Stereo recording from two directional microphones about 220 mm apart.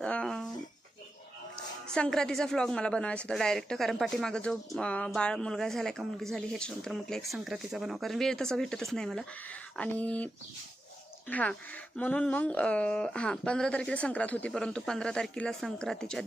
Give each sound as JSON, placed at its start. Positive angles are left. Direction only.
{"t": 0.0, "sound": "a sound", "side_deg": 5}
{"t": 1.9, "sound": "a woman's voice", "side_deg": 5}
{"t": 11.3, "sound": "a woman's voice", "side_deg": 5}